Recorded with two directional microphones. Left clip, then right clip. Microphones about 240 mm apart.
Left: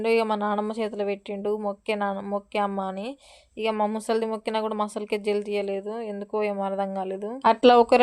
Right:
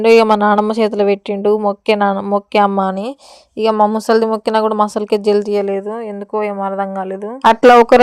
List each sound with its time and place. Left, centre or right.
0.0 s speech: right; by 7.3 s centre
7.4 s speech: right